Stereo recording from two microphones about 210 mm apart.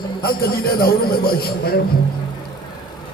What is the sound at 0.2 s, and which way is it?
Speech, 45° left (ahead or behind).